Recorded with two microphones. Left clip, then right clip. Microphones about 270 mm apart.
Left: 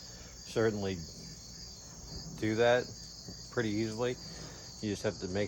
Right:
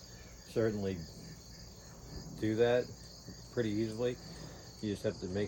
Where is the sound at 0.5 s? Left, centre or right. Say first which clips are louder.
Left 2 dB; centre.